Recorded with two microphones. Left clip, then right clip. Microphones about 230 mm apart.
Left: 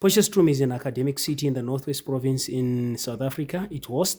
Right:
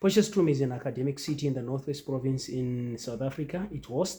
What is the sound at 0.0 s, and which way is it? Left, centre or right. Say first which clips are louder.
Speech: left 5 dB; left.